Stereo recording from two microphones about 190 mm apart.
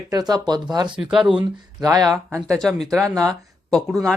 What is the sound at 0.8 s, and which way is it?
Speech, 5° right (ahead or behind).